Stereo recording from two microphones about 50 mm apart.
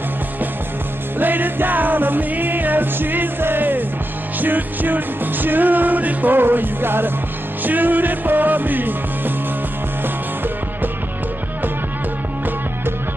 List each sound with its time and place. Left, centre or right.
1.2 s music: right